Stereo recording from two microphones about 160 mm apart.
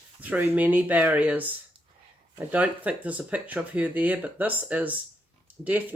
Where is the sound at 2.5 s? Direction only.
10° right (ahead or behind).